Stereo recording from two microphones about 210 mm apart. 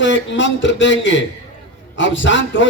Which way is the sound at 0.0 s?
60° left (ahead or behind).